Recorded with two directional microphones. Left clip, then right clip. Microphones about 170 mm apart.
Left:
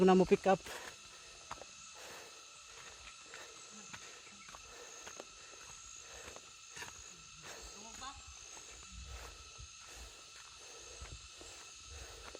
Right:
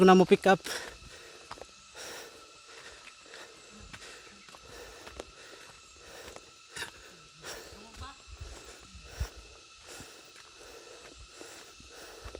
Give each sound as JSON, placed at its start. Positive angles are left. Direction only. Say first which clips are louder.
{"t": 0.0, "sound": "speech", "louder": "right 8 dB", "side_deg": -55}
{"t": 2.0, "sound": "hiss", "louder": "right 9 dB", "side_deg": -45}
{"t": 6.8, "sound": "a sound", "louder": "right 9 dB", "side_deg": -40}